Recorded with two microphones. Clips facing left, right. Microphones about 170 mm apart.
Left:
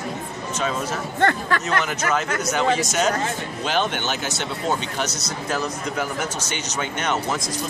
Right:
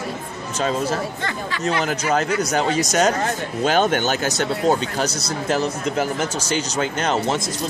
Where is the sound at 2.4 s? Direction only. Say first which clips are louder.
Right 1 dB; 35° right (ahead or behind).